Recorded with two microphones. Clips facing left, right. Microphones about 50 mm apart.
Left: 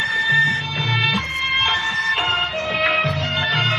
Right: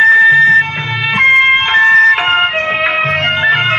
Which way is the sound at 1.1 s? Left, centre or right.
Right.